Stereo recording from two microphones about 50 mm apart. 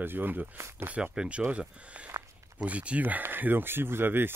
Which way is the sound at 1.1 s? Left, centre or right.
Right.